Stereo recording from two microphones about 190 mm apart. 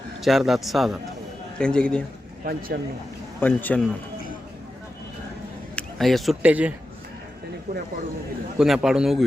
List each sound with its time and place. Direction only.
0.3 s a man's voice: centre (ahead or behind)
2.4 s speech: 50° right (ahead or behind)
3.4 s a man's voice: 10° left (ahead or behind)
5.7 s speech: centre (ahead or behind)
8.5 s a man's voice: centre (ahead or behind)